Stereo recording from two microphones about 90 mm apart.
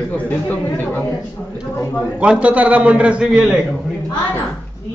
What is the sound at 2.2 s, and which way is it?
A man's voice, 15° right (ahead or behind).